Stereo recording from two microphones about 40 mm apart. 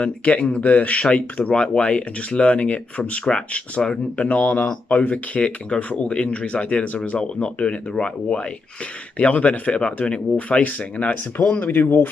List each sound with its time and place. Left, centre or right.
0.0 s speech: left
4.3 s speech: left
10.6 s speech: left
11.6 s speech: left